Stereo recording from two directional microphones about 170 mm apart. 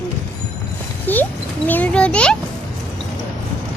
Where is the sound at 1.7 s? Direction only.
10° left (ahead or behind).